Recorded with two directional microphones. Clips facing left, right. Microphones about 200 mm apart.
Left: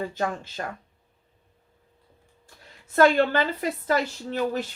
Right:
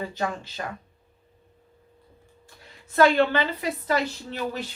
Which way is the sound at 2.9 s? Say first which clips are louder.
Even; 45° left (ahead or behind).